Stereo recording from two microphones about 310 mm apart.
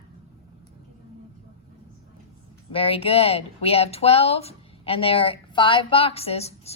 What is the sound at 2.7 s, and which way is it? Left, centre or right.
Speech, centre.